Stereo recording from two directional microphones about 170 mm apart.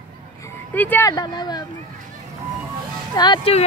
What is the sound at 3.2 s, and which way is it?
Speech, 25° left (ahead or behind).